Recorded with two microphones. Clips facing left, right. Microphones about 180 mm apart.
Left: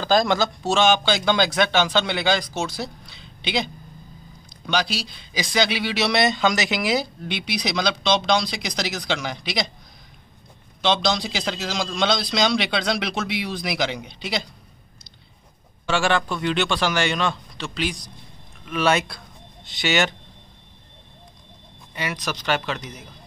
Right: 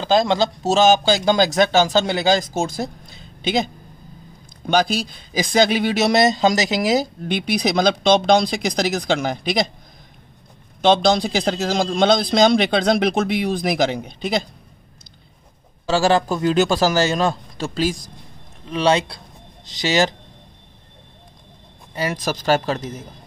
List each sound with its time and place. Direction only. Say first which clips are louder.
0.0 s speech: right 2 dB; 25° right (ahead or behind)
0.6 s a man's voice: right 6 dB; 40° right (ahead or behind)
10.8 s speech: right 6 dB; 50° right (ahead or behind)
15.9 s a man's voice: right 5 dB; 35° right (ahead or behind)
18.7 s a man's voice: right 3 dB; 30° right (ahead or behind)
21.9 s a man's voice: right 5 dB; 35° right (ahead or behind)